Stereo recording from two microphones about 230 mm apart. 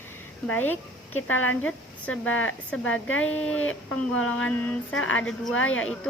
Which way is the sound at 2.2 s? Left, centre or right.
Left.